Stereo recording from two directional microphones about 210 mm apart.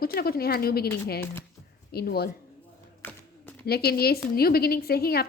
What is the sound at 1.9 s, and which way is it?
Speech, 50° left (ahead or behind).